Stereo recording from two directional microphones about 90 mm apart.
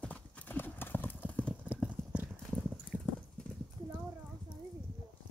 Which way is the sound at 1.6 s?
15° right (ahead or behind).